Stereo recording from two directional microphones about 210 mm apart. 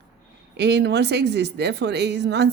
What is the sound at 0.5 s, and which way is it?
A woman's voice, 55° right (ahead or behind).